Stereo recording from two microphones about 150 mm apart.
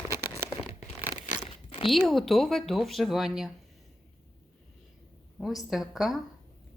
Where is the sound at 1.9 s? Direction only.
Centre (ahead or behind).